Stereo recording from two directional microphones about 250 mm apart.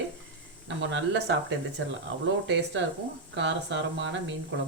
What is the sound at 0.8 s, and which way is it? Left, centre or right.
Speech, right.